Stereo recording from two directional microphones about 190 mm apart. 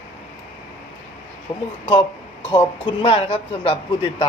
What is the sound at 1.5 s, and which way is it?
Speech, 20° left (ahead or behind).